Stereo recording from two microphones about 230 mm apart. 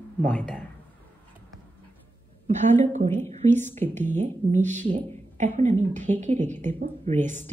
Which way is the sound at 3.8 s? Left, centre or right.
Centre.